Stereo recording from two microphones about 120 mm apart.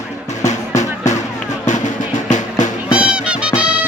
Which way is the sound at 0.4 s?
80° left.